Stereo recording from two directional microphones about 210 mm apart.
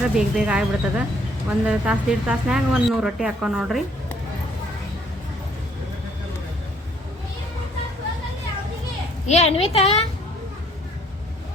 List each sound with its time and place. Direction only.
0.0 s speech: 5° right (ahead or behind)
9.2 s a woman's voice: 30° left (ahead or behind)